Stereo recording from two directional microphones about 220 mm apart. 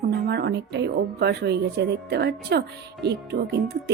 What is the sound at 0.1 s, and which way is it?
Speech, 45° right (ahead or behind).